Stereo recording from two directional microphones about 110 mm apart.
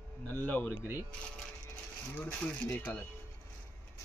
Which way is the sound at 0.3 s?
15° left (ahead or behind).